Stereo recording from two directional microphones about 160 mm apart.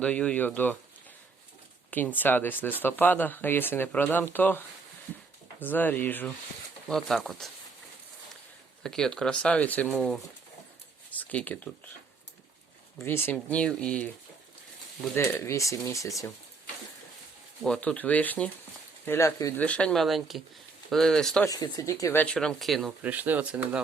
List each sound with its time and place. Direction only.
0.0 s speech: 5° left (ahead or behind)
1.9 s speech: 10° left (ahead or behind)
8.8 s speech: 5° left (ahead or behind)
13.0 s speech: 15° left (ahead or behind)
17.6 s speech: 5° left (ahead or behind)
19.6 s speech: 5° left (ahead or behind)
21.4 s speech: 20° left (ahead or behind); by 22.9 s centre (ahead or behind)
22.9 s speech: 10° right (ahead or behind)